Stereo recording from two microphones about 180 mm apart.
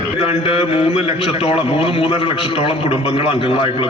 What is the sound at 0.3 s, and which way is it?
A man's voice, 35° left (ahead or behind).